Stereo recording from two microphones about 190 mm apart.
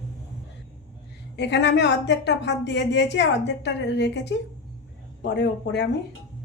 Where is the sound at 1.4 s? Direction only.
65° left (ahead or behind).